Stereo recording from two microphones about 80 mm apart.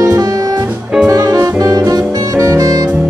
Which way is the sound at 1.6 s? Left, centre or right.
Right.